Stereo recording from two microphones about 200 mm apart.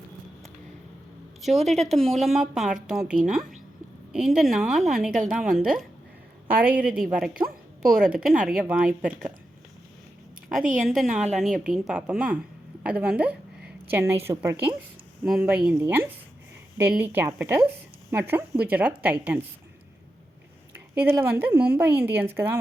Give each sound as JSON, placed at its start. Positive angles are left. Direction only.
{"t": 1.4, "sound": "a woman's voice", "side_deg": 0}
{"t": 7.4, "sound": "speech", "side_deg": -15}
{"t": 7.8, "sound": "a woman's voice", "side_deg": -5}
{"t": 10.8, "sound": "a woman's voice", "side_deg": 0}
{"t": 20.7, "sound": "speech", "side_deg": -10}